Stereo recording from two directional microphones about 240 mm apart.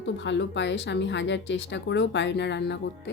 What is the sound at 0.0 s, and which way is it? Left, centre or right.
Speech, left.